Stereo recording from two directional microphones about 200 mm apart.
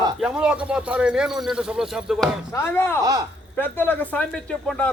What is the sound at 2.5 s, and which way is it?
Speech, 10° left (ahead or behind).